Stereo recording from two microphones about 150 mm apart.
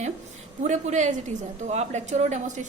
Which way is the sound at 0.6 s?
55° right (ahead or behind).